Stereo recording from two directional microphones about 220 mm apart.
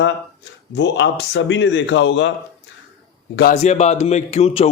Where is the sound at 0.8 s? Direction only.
55° left (ahead or behind).